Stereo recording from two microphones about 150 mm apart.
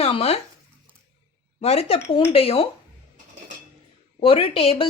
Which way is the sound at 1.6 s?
45° left (ahead or behind).